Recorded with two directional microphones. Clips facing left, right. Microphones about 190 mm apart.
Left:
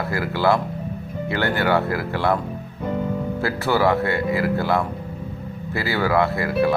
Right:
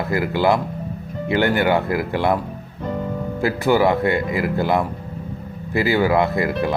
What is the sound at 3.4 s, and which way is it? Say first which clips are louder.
Speech: right 4 dB; 15° right (ahead or behind).